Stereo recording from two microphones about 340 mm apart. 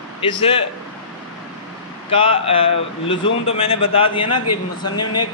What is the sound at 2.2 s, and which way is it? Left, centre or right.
Speech, centre.